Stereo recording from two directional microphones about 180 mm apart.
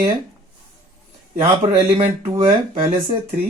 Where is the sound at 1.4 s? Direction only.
30° right (ahead or behind).